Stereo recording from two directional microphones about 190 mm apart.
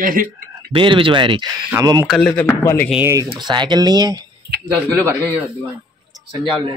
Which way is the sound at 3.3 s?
25° right (ahead or behind).